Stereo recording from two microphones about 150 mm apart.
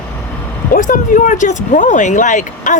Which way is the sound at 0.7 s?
60° left (ahead or behind).